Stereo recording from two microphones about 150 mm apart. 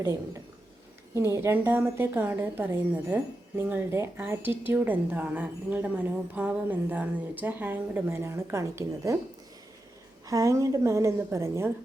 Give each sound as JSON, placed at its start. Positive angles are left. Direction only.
{"t": 0.0, "sound": "a woman's voice", "side_deg": -20}
{"t": 10.2, "sound": "a woman's voice", "side_deg": -20}